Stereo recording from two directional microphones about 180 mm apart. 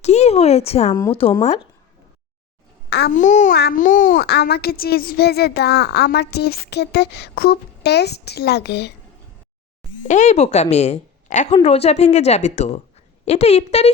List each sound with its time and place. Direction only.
0.0 s a woman's voice: 35° left (ahead or behind)
3.1 s speech: 45° left (ahead or behind)
3.5 s speech: 55° left (ahead or behind)
4.3 s speech: 65° left (ahead or behind)
10.0 s a woman's voice: 40° left (ahead or behind)